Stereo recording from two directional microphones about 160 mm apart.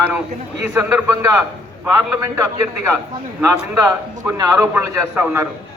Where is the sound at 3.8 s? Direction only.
20° right (ahead or behind).